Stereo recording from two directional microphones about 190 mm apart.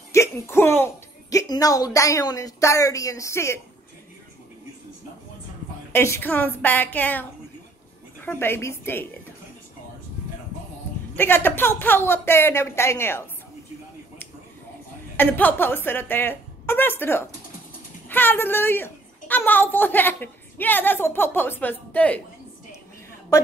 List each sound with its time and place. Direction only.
0.1 s a child's voice: 15° left (ahead or behind)
5.9 s a woman's voice: 10° left (ahead or behind)
8.3 s a woman's voice: 10° left (ahead or behind)
11.1 s a woman's voice: 10° left (ahead or behind)
15.1 s a woman's voice: 10° left (ahead or behind)